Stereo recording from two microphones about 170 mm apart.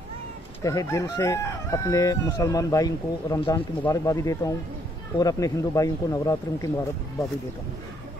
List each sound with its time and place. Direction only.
0.7 s chicken: 20° left (ahead or behind)